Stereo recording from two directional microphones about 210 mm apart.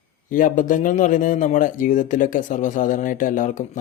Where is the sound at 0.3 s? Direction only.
40° left (ahead or behind).